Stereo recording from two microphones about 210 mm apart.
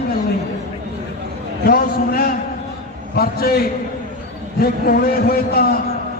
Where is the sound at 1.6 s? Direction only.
45° left (ahead or behind).